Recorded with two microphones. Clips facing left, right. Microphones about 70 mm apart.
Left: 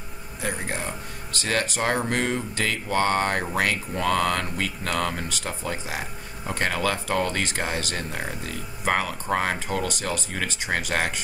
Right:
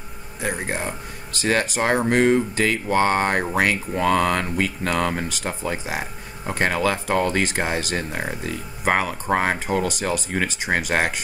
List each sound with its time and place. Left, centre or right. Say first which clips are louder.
0.4 s speech: right 4 dB; right